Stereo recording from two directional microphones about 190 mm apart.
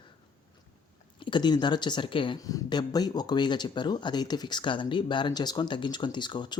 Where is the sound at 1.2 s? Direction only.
25° left (ahead or behind).